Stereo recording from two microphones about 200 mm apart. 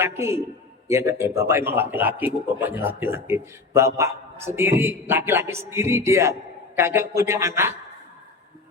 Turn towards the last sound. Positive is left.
turn(degrees=-15)  # may be behind; listen again after turning